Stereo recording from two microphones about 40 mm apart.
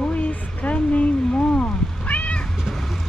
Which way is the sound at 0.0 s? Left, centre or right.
Left.